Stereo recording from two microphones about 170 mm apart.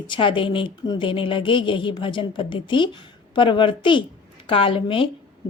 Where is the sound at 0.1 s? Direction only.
30° left (ahead or behind).